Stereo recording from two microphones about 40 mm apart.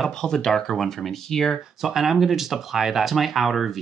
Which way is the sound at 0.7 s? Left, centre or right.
Centre.